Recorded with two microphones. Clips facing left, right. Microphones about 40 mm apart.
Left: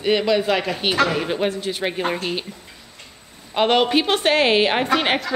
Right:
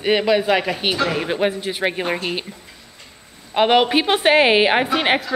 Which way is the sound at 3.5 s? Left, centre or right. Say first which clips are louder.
Right 2 dB; centre.